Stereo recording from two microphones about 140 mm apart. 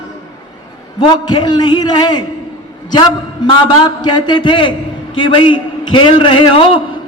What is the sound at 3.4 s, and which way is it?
A man's voice, 35° left (ahead or behind).